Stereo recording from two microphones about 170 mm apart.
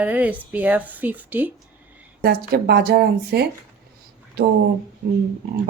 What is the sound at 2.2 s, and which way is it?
Speech, 65° right (ahead or behind).